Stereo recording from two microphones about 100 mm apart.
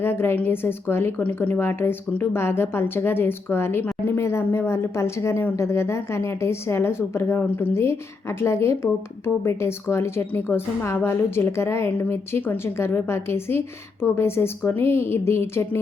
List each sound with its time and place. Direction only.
0.0 s a woman's voice: 25° left (ahead or behind)